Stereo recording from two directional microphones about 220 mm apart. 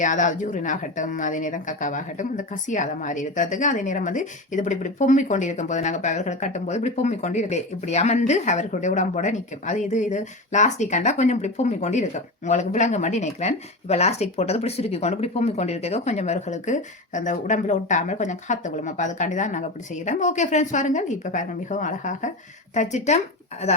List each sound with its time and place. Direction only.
0.0 s a woman's voice: 35° left (ahead or behind)